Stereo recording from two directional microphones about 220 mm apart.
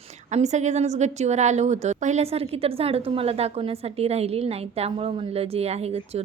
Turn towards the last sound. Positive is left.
turn(degrees=-30)  # may be behind; listen again after turning